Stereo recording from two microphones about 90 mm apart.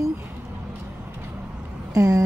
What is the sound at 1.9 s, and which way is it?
Speech, 40° right (ahead or behind).